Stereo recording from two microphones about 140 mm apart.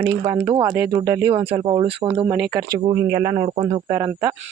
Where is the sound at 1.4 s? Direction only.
35° right (ahead or behind).